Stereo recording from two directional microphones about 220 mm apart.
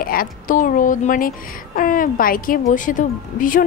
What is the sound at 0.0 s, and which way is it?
A woman's voice, 40° left (ahead or behind).